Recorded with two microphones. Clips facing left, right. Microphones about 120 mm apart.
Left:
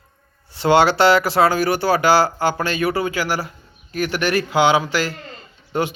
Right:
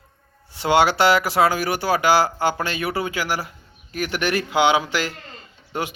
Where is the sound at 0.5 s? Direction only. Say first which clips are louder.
Left 3 dB; 10° right (ahead or behind).